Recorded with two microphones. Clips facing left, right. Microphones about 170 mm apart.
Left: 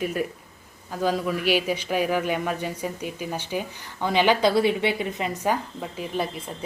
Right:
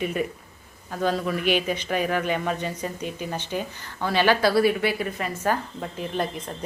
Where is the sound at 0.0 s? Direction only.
Centre (ahead or behind).